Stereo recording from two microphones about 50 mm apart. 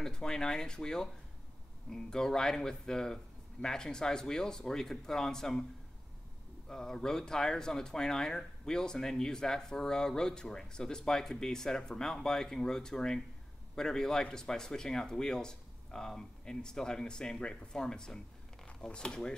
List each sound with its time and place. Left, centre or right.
0.0 s speech: centre
6.7 s speech: centre